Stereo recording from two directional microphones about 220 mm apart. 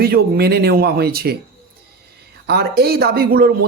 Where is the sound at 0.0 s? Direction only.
45° right (ahead or behind).